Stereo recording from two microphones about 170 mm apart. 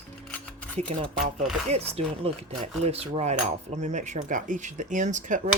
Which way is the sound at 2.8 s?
35° right (ahead or behind).